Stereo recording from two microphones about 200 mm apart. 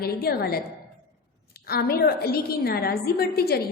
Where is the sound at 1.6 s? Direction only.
50° left (ahead or behind).